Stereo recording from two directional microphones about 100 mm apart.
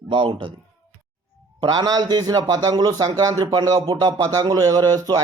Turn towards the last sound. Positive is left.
turn(degrees=-40)  # may be behind; listen again after turning